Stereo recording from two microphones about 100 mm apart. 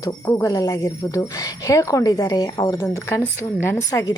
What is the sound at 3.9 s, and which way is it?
Speech, 35° left (ahead or behind).